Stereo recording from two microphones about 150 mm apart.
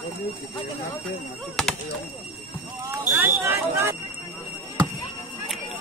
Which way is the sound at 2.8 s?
15° right (ahead or behind).